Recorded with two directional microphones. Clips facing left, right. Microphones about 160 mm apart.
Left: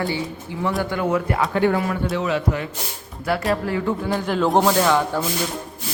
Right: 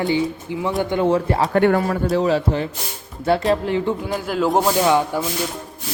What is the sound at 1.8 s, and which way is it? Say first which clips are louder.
A man's voice: right 4 dB; 35° right (ahead or behind).